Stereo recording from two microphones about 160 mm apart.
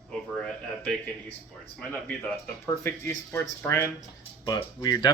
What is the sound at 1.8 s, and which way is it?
Speech, 10° left (ahead or behind).